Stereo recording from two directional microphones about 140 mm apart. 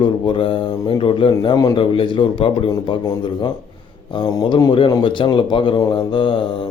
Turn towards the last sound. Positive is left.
turn(degrees=35)  # may be behind; listen again after turning